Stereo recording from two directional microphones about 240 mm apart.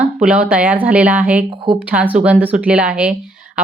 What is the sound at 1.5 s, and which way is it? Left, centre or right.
Speech, centre.